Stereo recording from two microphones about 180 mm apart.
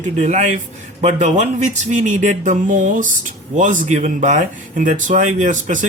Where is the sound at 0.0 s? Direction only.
40° right (ahead or behind).